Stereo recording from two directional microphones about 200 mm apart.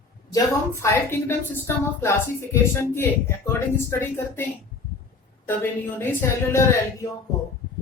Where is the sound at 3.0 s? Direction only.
10° left (ahead or behind).